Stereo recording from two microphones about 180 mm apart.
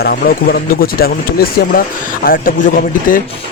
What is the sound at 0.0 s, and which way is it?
Speech, 55° left (ahead or behind).